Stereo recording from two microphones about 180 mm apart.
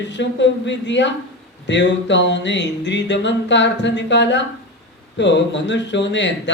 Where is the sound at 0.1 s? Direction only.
80° left.